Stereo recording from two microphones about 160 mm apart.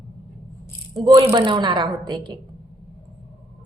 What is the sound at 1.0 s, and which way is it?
A woman's voice, 30° right (ahead or behind).